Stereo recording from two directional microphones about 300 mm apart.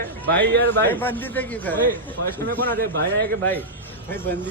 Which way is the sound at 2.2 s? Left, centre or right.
Right.